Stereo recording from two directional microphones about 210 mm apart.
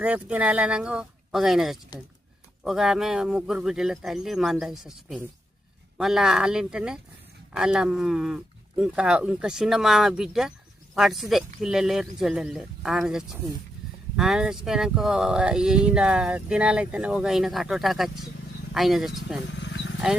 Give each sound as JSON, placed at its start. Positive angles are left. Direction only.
{"t": 0.0, "sound": "speech", "side_deg": -5}
{"t": 19.6, "sound": "wild animals", "side_deg": 60}